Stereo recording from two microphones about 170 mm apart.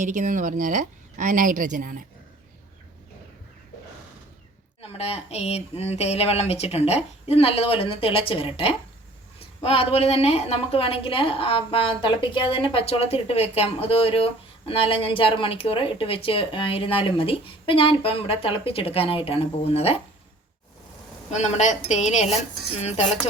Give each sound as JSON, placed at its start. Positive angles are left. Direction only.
{"t": 0.0, "sound": "a woman's voice", "side_deg": -45}
{"t": 4.8, "sound": "a woman's voice", "side_deg": 35}
{"t": 21.2, "sound": "a woman's voice", "side_deg": 40}